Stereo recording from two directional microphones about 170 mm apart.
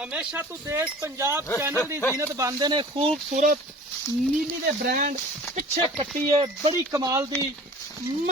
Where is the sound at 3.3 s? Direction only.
50° right (ahead or behind).